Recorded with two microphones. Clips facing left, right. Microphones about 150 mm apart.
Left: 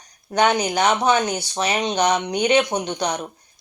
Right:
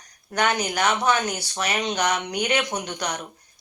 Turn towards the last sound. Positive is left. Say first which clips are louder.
# left 5 dB
turn(degrees=25)  # may be behind; listen again after turning